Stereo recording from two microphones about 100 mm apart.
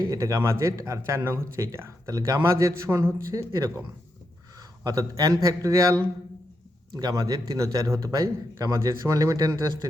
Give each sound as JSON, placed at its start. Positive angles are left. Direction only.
{"t": 0.1, "sound": "speech", "side_deg": -35}
{"t": 4.8, "sound": "speech", "side_deg": -35}